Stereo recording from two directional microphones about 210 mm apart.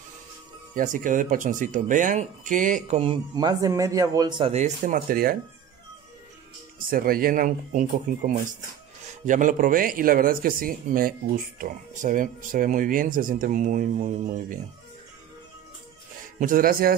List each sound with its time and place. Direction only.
0.7 s speech: 40° right (ahead or behind)
6.9 s speech: 45° right (ahead or behind)
16.3 s speech: 40° right (ahead or behind)